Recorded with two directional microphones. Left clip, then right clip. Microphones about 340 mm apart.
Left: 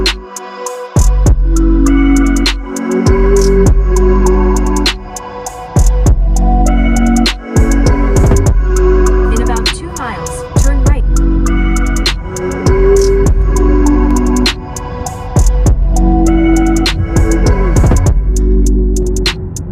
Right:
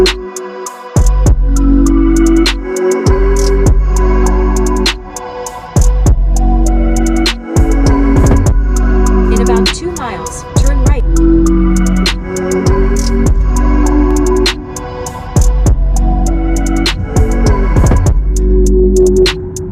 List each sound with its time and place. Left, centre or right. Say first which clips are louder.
0.9 s music: even; centre
6.7 s music: left 1 dB; centre